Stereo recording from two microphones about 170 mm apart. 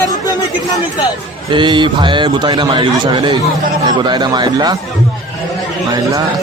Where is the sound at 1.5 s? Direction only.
30° right (ahead or behind).